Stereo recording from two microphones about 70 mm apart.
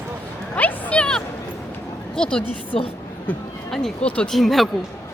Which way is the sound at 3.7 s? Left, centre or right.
Centre.